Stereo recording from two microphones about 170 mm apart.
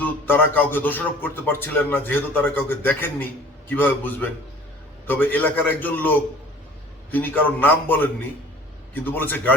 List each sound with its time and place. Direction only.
0.0 s a man's voice: 10° left (ahead or behind)